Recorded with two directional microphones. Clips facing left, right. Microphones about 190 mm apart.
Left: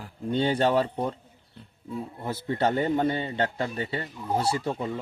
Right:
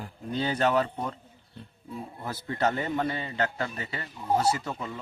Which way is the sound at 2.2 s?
25° left (ahead or behind).